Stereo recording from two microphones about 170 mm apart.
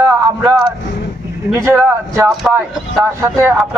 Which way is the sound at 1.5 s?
15° right (ahead or behind).